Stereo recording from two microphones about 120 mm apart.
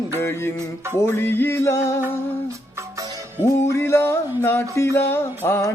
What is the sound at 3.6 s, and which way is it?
Music, 25° left (ahead or behind).